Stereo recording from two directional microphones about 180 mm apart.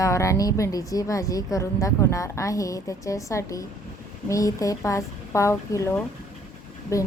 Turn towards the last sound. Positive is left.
turn(degrees=15)  # may be behind; listen again after turning